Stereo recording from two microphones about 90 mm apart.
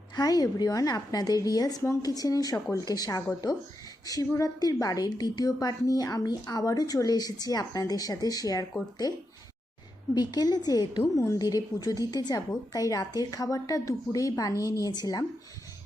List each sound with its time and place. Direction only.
0.2 s a woman's voice: 45° left (ahead or behind)
11.1 s a woman's voice: 35° left (ahead or behind)